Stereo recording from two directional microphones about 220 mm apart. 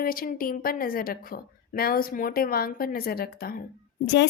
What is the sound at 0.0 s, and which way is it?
A woman's voice, 40° left (ahead or behind).